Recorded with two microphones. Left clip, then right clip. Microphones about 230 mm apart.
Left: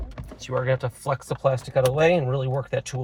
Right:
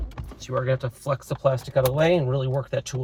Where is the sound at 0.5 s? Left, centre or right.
Left.